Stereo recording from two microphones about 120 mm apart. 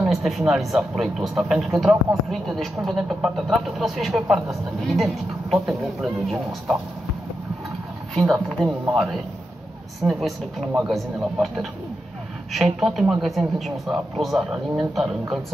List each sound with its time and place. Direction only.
0.0 s speech: centre (ahead or behind)
8.1 s speech: 5° left (ahead or behind)